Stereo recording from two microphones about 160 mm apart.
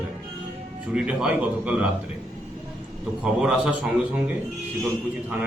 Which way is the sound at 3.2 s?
5° right (ahead or behind).